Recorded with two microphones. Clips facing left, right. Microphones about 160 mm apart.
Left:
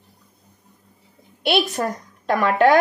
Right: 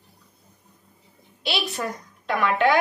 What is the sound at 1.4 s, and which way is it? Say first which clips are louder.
A woman's voice: left 7 dB; 50° left (ahead or behind).